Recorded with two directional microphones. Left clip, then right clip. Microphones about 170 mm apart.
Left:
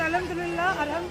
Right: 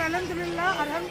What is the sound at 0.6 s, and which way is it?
Speech, 15° left (ahead or behind).